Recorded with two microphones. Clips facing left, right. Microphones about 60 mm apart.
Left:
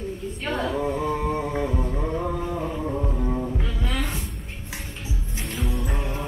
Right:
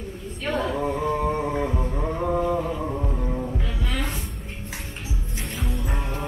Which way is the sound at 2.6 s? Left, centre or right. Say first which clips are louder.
Even; centre.